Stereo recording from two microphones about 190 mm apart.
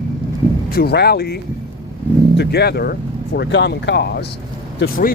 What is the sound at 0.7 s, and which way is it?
Speech, 55° left (ahead or behind).